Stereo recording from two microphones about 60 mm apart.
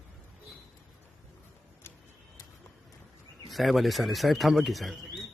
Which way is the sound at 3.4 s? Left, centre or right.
Centre.